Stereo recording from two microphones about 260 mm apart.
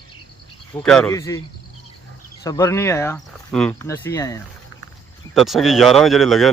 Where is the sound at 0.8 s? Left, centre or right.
Centre.